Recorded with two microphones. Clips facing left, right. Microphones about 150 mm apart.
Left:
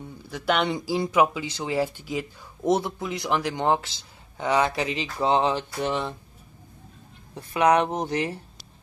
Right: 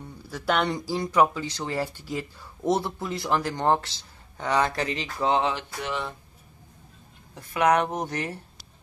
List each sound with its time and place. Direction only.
0.6 s speech: 5° left (ahead or behind)
4.8 s speech: 25° left (ahead or behind)
7.3 s speech: 25° left (ahead or behind)